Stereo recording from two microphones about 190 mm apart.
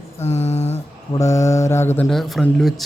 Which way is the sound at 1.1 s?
15° left (ahead or behind).